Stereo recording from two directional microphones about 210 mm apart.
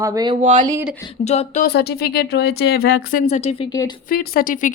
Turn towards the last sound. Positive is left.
turn(degrees=40)  # may be behind; listen again after turning